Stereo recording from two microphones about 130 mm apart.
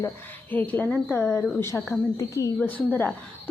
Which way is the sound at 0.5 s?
10° left (ahead or behind).